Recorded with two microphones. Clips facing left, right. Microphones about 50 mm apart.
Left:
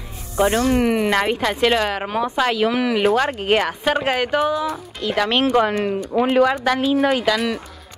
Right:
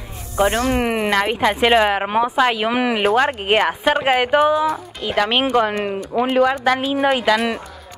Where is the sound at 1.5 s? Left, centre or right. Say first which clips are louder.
Right 6 dB; right.